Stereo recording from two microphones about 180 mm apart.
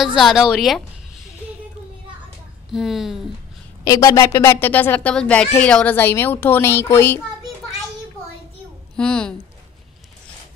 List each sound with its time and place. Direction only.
0.0 s a woman's voice: centre (ahead or behind)
2.7 s a woman's voice: centre (ahead or behind)
3.8 s a woman's voice: 20° left (ahead or behind)
8.9 s a woman's voice: 5° left (ahead or behind)